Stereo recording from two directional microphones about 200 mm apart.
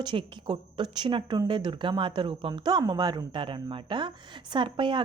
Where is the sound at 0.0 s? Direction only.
25° right (ahead or behind).